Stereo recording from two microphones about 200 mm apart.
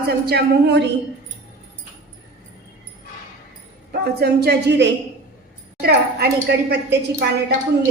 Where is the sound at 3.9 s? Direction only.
50° right (ahead or behind).